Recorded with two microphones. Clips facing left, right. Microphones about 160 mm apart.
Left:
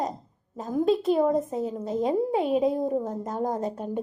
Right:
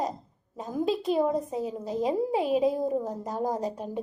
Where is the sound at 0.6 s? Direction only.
Centre (ahead or behind).